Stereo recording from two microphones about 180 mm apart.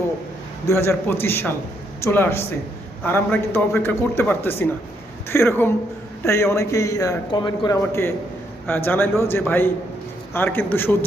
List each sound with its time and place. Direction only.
0.7 s a man's voice: 15° left (ahead or behind)
8.6 s a man's voice: 10° left (ahead or behind)